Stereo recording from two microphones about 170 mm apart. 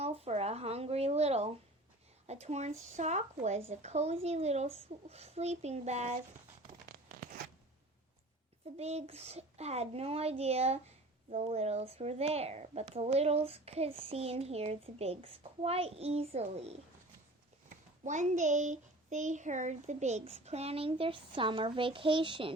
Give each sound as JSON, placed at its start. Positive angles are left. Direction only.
{"t": 0.0, "sound": "a sound", "side_deg": -40}
{"t": 2.2, "sound": "a child's voice", "side_deg": -40}
{"t": 7.1, "sound": "zipper", "side_deg": -55}
{"t": 8.8, "sound": "a child's voice", "side_deg": -40}
{"t": 18.0, "sound": "a child's voice", "side_deg": -45}